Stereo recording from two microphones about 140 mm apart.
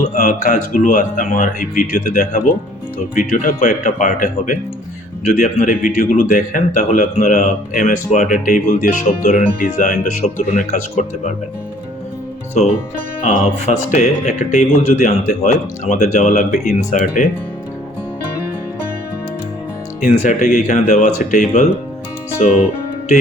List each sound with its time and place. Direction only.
0.1 s a man's voice: 65° left (ahead or behind)
13.2 s a man's voice: 55° left (ahead or behind)
20.0 s a man's voice: 65° left (ahead or behind)